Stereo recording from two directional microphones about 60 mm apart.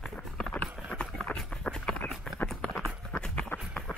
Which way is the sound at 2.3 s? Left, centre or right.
Centre.